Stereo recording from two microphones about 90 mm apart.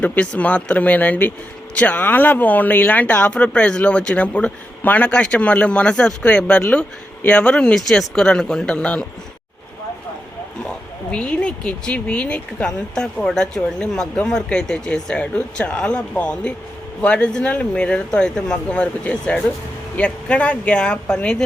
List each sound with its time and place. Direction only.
0.0 s speech: 15° left (ahead or behind)
11.1 s speech: 10° left (ahead or behind)